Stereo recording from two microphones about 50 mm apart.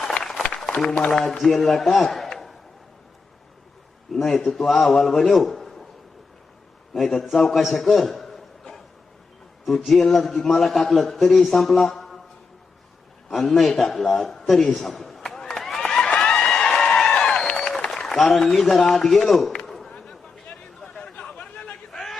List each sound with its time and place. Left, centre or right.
0.2 s music: centre
1.0 s a man's voice: centre
4.1 s a man's voice: centre
6.9 s a man's voice: centre
13.3 s a man's voice: centre
16.0 s a sound: centre
19.6 s chop: centre
20.8 s chatter: left